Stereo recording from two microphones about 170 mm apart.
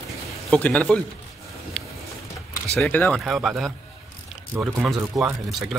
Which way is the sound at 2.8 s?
10° left (ahead or behind).